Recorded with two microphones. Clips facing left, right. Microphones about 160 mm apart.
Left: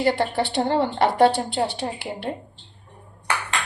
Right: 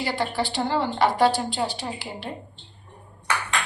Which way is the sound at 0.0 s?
55° left (ahead or behind).